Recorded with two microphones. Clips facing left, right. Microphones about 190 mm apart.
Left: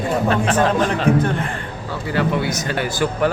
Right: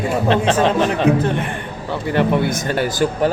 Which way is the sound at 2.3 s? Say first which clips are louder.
Right 3 dB; 55° right (ahead or behind).